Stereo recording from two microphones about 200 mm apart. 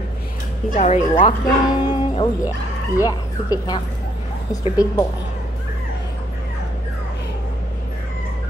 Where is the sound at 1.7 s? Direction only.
20° left (ahead or behind).